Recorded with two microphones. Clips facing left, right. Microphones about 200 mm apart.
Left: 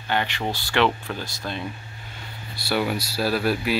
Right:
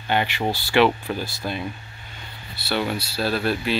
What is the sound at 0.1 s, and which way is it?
Speech, 15° right (ahead or behind).